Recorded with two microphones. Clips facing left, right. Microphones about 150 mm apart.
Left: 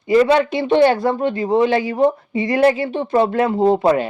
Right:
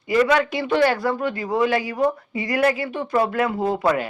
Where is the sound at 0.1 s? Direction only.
30° left (ahead or behind).